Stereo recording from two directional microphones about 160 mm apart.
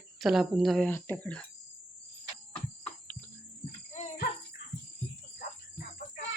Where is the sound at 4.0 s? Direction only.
50° left (ahead or behind).